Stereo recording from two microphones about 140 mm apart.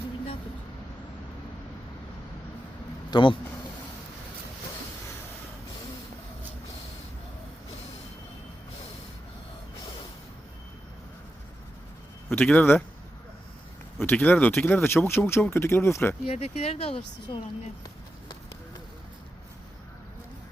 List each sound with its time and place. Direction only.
3.1 s speech: 35° left (ahead or behind)
12.3 s speech: 10° left (ahead or behind)
14.0 s speech: 10° left (ahead or behind)
16.2 s speech: 45° left (ahead or behind)